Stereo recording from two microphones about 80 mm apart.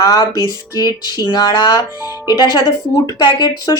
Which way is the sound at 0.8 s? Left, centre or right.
Left.